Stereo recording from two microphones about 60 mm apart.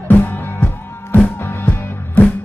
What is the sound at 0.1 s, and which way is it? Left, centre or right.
Music, left.